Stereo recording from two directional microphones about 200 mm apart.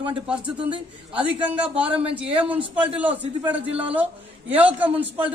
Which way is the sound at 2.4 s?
5° right (ahead or behind).